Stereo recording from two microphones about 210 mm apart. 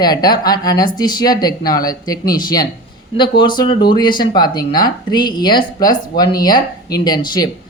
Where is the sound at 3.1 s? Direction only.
20° left (ahead or behind).